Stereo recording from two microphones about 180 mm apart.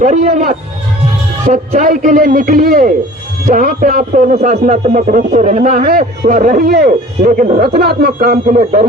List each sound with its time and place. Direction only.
0.0 s a man's voice: 40° right (ahead or behind)
1.5 s a man's voice: 45° right (ahead or behind)
7.2 s a man's voice: 40° right (ahead or behind)